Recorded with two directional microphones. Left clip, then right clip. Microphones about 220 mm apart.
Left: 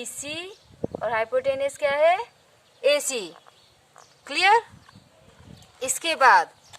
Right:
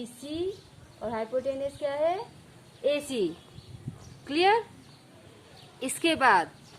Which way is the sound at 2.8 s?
30° left (ahead or behind).